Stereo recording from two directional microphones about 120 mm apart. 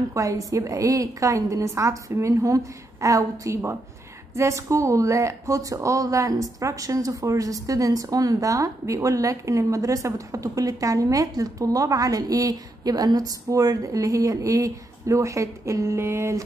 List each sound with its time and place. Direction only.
0.1 s speech: 25° right (ahead or behind)